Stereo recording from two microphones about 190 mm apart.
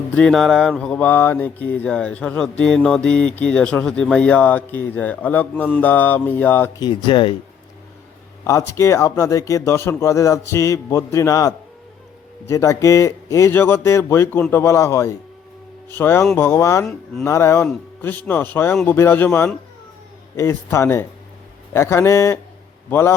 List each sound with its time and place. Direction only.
0.1 s mantra: 5° left (ahead or behind)
5.8 s speech: 10° left (ahead or behind)
6.7 s speech: 25° left (ahead or behind)
8.4 s speech: 15° left (ahead or behind)